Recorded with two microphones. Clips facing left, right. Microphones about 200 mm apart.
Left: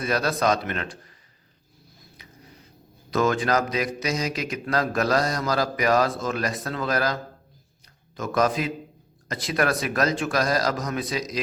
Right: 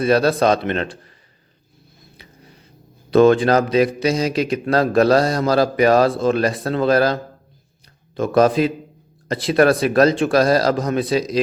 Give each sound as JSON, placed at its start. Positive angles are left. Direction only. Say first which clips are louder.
{"t": 0.0, "sound": "speech", "louder": "right 8 dB", "side_deg": -30}
{"t": 3.1, "sound": "speech", "louder": "right 10 dB", "side_deg": -30}